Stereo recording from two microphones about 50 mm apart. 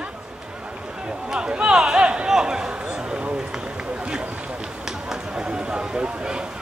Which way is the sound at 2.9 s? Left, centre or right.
Right.